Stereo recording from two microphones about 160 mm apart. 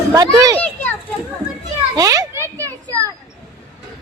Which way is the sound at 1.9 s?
20° right (ahead or behind).